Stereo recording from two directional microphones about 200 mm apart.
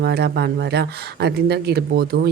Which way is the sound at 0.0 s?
55° right (ahead or behind).